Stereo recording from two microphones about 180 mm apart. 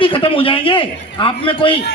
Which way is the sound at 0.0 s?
30° left (ahead or behind).